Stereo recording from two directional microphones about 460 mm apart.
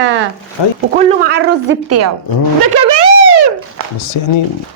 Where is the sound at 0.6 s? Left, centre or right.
Left.